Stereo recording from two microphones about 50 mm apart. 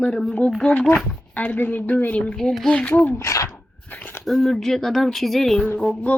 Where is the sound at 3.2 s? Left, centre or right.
Left.